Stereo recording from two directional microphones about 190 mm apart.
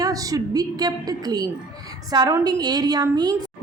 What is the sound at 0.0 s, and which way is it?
A woman's voice, 20° right (ahead or behind).